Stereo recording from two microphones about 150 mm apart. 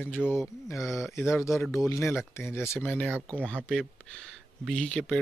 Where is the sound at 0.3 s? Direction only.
20° left (ahead or behind).